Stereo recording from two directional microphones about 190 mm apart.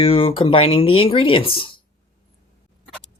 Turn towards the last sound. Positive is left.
turn(degrees=25)  # may be behind; listen again after turning